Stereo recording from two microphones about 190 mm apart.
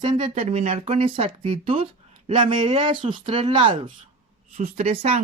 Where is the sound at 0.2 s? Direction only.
35° right (ahead or behind).